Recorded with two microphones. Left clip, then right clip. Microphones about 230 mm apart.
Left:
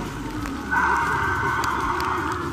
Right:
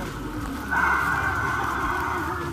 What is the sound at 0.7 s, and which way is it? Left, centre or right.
Horse, right.